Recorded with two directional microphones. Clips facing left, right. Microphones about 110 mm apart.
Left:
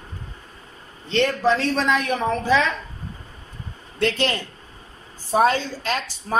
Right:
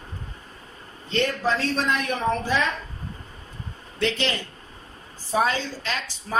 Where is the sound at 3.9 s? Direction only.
50° left (ahead or behind).